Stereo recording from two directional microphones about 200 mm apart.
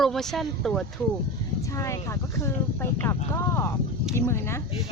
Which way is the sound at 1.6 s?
15° left (ahead or behind).